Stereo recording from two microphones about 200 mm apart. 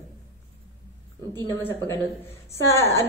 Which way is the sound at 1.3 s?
10° left (ahead or behind).